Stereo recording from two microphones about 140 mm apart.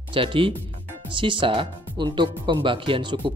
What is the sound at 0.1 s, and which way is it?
Speech, 40° right (ahead or behind).